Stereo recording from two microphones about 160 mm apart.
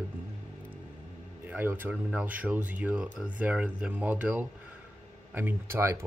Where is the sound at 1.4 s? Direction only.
10° right (ahead or behind).